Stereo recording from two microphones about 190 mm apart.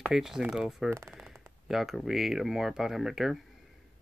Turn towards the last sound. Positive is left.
turn(degrees=0)  # may be behind; listen again after turning